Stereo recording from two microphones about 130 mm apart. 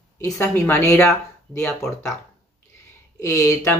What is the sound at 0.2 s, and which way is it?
Speech, 20° left (ahead or behind).